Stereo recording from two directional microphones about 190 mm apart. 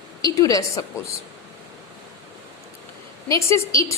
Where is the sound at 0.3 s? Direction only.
20° left (ahead or behind).